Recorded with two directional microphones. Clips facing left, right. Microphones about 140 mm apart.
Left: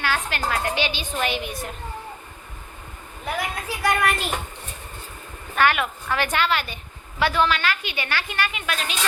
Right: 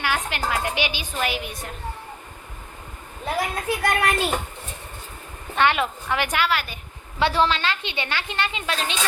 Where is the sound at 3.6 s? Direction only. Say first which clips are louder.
Left 2 dB; 60° right (ahead or behind).